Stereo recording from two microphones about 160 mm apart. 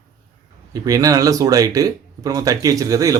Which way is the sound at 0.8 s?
20° right (ahead or behind).